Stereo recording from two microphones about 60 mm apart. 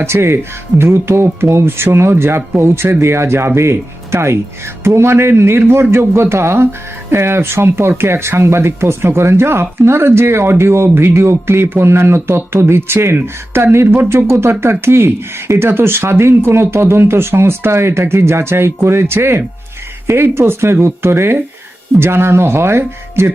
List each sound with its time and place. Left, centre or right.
0.0 s a man's voice: right